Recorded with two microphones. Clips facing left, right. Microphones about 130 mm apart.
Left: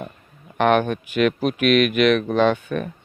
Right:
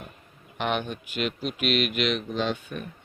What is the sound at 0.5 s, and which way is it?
Speech, 55° left (ahead or behind).